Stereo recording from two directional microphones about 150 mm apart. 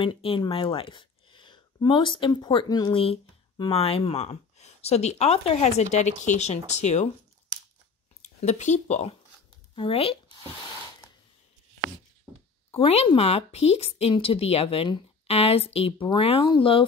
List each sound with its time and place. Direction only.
0.0 s speech: 35° left (ahead or behind)
8.2 s speech: 50° left (ahead or behind)
12.7 s speech: 40° left (ahead or behind)